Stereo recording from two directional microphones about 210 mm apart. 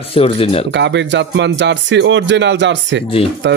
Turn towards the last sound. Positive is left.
turn(degrees=-55)  # may be behind; listen again after turning